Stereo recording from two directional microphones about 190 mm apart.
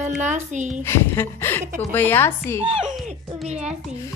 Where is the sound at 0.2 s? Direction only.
40° right (ahead or behind).